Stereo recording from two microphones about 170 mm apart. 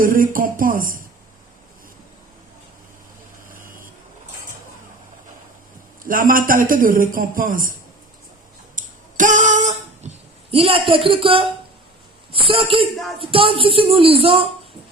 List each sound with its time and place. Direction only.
0.0 s speech: 55° right (ahead or behind)
3.5 s vehicle: 55° right (ahead or behind)
6.1 s a man's voice: 55° right (ahead or behind)
8.7 s a sound: 50° right (ahead or behind); by 11.4 s 30° right (ahead or behind)
12.3 s speech: 30° right (ahead or behind)